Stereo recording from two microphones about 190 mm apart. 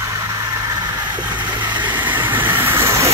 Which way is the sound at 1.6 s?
25° right (ahead or behind).